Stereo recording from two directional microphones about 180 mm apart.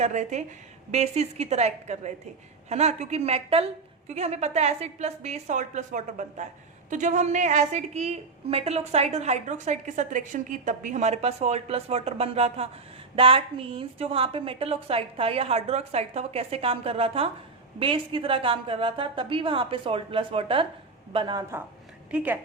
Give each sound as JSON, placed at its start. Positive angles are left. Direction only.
{"t": 0.0, "sound": "a woman's voice", "side_deg": -40}
{"t": 22.1, "sound": "a woman's voice", "side_deg": -10}